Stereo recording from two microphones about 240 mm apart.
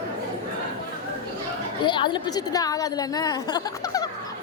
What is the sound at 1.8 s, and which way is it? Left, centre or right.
A woman's voice, centre.